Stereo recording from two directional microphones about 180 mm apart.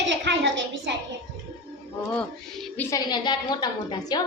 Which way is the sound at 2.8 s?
20° left (ahead or behind).